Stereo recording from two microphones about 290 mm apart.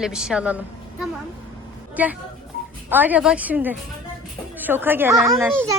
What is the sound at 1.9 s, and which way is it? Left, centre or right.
A woman's voice, centre.